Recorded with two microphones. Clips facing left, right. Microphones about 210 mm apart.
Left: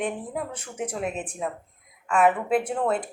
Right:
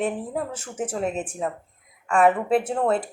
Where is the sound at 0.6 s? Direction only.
30° right (ahead or behind).